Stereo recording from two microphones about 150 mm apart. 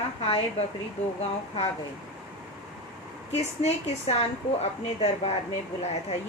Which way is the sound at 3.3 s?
45° left (ahead or behind).